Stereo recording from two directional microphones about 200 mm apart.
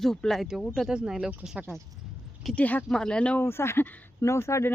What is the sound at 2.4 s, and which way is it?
Speech, 5° left (ahead or behind).